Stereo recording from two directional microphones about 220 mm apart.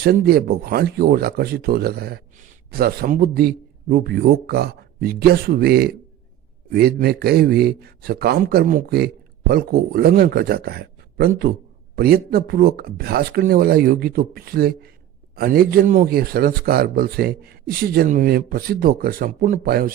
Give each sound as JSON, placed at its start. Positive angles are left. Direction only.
{"t": 0.0, "sound": "speech", "side_deg": -45}